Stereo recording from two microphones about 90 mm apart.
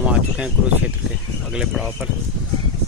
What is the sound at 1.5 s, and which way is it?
Speech, 5° right (ahead or behind).